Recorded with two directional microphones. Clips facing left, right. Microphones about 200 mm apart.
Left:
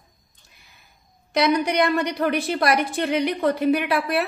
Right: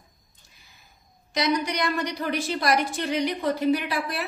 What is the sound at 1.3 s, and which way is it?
A woman's voice, 60° left (ahead or behind).